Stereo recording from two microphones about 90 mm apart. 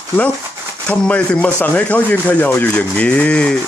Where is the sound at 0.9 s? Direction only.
10° left (ahead or behind).